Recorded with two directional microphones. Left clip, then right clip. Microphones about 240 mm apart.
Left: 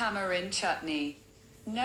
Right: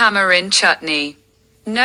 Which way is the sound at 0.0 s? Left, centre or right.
Right.